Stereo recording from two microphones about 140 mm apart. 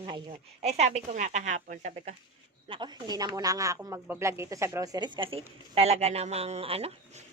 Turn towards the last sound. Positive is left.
turn(degrees=-45)  # may be behind; listen again after turning